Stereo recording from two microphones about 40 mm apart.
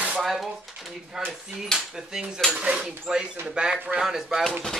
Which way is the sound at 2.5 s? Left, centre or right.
Right.